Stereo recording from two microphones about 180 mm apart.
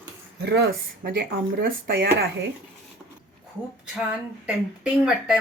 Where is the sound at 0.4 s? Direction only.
65° right (ahead or behind).